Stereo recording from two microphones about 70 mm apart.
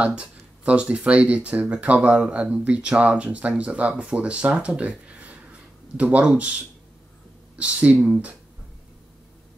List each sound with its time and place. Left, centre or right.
0.0 s speech: centre
7.5 s speech: centre